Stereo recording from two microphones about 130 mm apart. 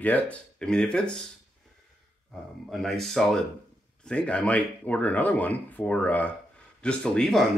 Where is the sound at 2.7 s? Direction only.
Centre (ahead or behind).